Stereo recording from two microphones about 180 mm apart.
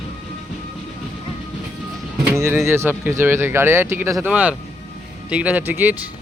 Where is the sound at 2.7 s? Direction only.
15° right (ahead or behind).